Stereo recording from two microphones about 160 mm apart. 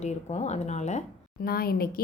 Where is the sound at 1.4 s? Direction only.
70° left (ahead or behind).